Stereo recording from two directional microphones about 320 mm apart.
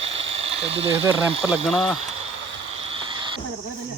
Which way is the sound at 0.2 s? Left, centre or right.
Centre.